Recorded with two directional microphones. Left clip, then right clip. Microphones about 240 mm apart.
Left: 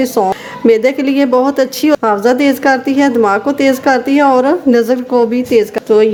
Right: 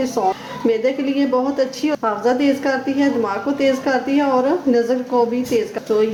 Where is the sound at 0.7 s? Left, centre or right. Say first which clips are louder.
Left 8 dB; left.